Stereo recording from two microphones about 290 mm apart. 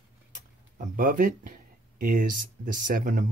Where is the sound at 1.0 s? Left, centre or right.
Right.